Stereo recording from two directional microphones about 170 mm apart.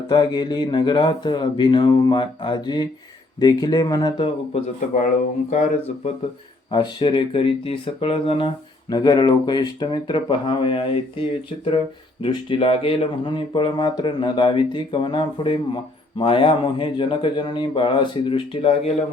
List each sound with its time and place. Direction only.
0.1 s speech: 25° left (ahead or behind)
4.9 s speech: 45° left (ahead or behind)
6.7 s speech: 30° left (ahead or behind)